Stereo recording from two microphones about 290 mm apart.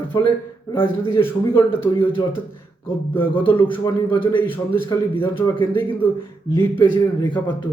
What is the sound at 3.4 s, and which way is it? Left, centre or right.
A man's voice, centre.